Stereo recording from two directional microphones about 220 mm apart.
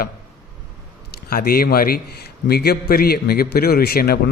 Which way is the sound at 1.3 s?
45° left (ahead or behind).